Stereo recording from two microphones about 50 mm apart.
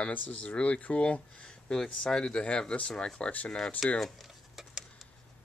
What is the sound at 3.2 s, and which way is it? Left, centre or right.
Speech, left.